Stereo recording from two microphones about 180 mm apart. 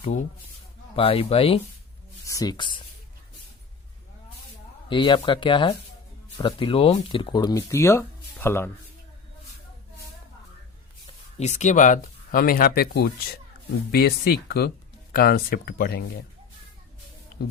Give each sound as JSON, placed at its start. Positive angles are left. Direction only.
{"t": 0.9, "sound": "speech", "side_deg": 30}
{"t": 2.2, "sound": "speech", "side_deg": 20}
{"t": 4.9, "sound": "speech", "side_deg": 25}
{"t": 11.3, "sound": "speech", "side_deg": 40}